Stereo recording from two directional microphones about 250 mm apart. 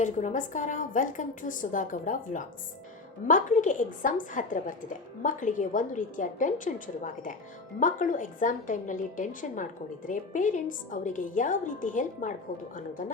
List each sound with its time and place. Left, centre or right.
0.0 s a woman's voice: left